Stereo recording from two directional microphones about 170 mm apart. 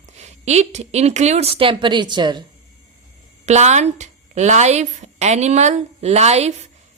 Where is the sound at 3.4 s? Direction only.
40° right (ahead or behind).